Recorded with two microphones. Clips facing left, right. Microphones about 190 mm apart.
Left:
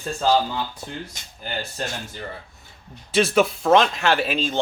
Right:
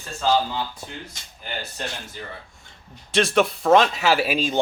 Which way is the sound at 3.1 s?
Centre (ahead or behind).